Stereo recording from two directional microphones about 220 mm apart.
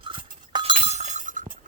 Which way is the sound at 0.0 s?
20° right (ahead or behind).